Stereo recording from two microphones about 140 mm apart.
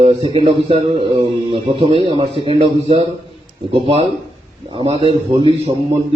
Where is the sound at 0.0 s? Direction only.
35° right (ahead or behind).